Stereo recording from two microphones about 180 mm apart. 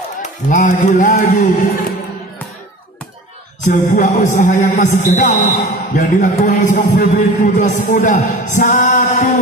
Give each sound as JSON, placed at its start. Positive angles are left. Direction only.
{"t": 0.2, "sound": "speech", "side_deg": 45}
{"t": 3.6, "sound": "speech", "side_deg": 45}